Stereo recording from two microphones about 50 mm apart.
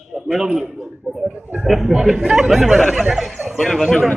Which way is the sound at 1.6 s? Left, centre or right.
Centre.